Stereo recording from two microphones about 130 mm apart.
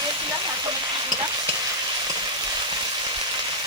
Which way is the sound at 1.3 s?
30° right (ahead or behind).